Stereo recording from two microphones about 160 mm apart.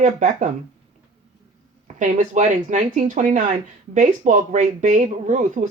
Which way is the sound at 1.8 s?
50° right (ahead or behind).